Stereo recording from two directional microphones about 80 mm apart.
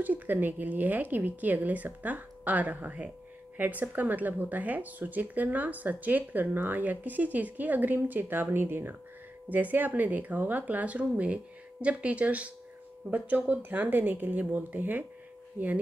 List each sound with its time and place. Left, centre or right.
0.0 s speech: right